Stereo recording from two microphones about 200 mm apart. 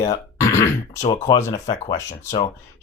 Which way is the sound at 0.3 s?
15° left (ahead or behind).